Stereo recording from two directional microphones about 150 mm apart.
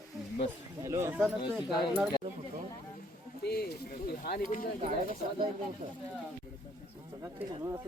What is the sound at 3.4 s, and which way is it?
Speech, 90° left.